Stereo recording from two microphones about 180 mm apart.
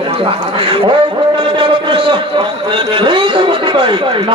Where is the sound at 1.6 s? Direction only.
25° right (ahead or behind).